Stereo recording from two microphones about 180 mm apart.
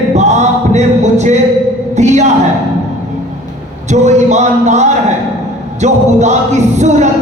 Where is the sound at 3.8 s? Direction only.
40° right (ahead or behind).